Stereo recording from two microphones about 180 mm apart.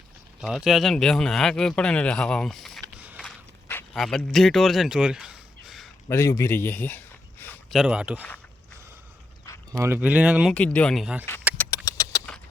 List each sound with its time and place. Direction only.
0.4 s speech: centre (ahead or behind)
3.2 s walk: 10° left (ahead or behind)
3.9 s speech: centre (ahead or behind)
6.1 s a man's voice: 15° left (ahead or behind)
7.7 s speech: 5° right (ahead or behind)
9.7 s speech: 15° right (ahead or behind)
10.5 s speech: 10° left (ahead or behind)
11.5 s a sound: 10° left (ahead or behind)